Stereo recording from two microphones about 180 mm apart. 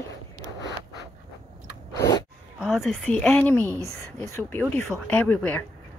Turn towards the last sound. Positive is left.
turn(degrees=10)  # may be behind; listen again after turning